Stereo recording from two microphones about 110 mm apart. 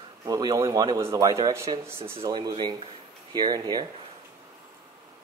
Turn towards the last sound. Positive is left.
turn(degrees=-40)  # may be behind; listen again after turning